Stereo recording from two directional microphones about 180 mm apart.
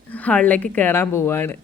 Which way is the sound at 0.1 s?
10° left (ahead or behind).